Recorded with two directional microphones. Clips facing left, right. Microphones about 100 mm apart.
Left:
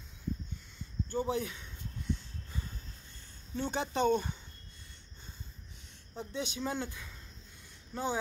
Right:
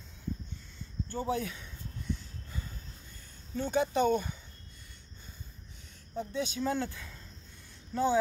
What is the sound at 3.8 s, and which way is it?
Speech, 25° left (ahead or behind).